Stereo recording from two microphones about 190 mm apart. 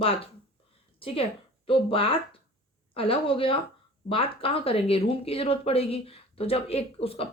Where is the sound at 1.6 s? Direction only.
30° left (ahead or behind).